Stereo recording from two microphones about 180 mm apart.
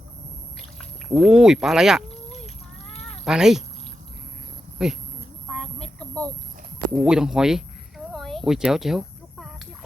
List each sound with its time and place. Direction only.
1.1 s speech: 5° right (ahead or behind)
3.0 s cat: centre (ahead or behind)
4.8 s speech: 5° right (ahead or behind)
5.5 s a sound: 5° left (ahead or behind)